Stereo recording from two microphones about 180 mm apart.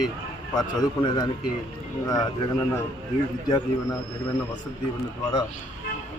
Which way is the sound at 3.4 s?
20° left (ahead or behind).